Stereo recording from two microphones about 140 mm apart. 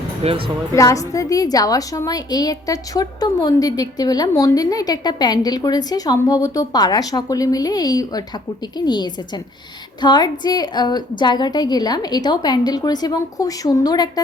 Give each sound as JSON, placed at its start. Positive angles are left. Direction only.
{"t": 0.2, "sound": "speech", "side_deg": -40}
{"t": 0.8, "sound": "a woman's voice", "side_deg": 25}